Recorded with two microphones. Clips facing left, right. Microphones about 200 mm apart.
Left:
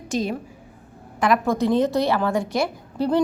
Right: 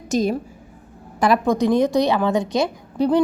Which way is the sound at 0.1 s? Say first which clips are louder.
Right 5 dB; 40° right (ahead or behind).